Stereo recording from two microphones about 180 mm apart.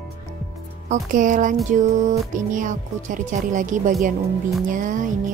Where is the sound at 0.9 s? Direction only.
45° right (ahead or behind).